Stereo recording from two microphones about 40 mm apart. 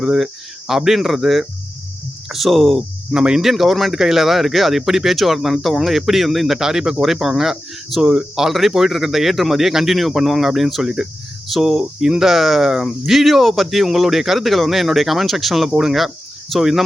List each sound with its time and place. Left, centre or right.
0.0 s speech: centre
3.1 s speech: centre
3.4 s speech: centre